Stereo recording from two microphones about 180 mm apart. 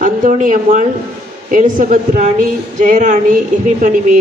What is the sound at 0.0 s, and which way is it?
A man's voice, 45° right (ahead or behind).